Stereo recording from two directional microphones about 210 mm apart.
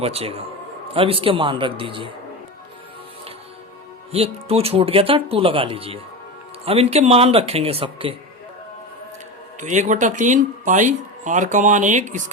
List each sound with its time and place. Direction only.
0.0 s speech: 30° right (ahead or behind)
4.1 s speech: 30° right (ahead or behind)
9.6 s speech: 35° right (ahead or behind)